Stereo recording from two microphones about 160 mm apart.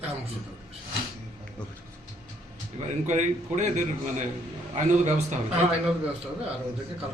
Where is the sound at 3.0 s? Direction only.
50° right (ahead or behind).